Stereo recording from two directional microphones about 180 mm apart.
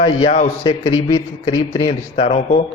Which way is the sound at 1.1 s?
20° left (ahead or behind).